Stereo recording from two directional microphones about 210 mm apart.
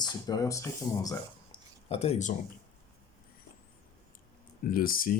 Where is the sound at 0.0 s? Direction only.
15° left (ahead or behind).